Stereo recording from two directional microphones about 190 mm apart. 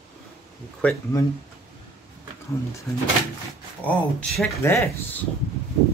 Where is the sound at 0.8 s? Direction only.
5° left (ahead or behind).